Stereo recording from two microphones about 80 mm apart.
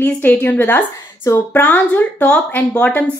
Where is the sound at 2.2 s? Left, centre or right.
Centre.